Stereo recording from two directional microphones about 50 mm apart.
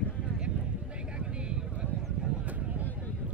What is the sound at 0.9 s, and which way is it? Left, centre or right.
Vehicle, centre.